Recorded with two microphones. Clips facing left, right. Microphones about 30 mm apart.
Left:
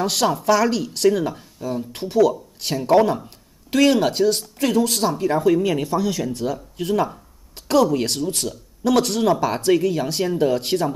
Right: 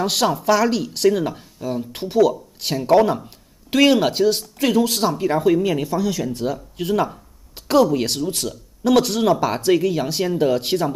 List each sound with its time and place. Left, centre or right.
0.0 s speech: centre
6.3 s speech: centre